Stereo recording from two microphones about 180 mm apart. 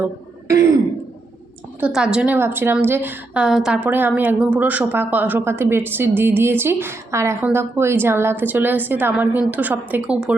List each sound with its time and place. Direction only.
0.0 s throat clearing: 15° right (ahead or behind)
1.8 s a woman's voice: 5° right (ahead or behind)